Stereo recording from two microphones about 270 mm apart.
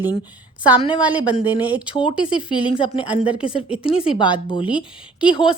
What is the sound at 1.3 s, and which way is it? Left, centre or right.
Speech, centre.